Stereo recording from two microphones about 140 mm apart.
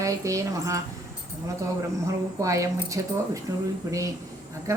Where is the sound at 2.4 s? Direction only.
25° right (ahead or behind).